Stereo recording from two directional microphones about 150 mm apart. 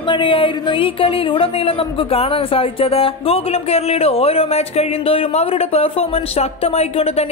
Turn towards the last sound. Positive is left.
turn(degrees=45)  # may be behind; listen again after turning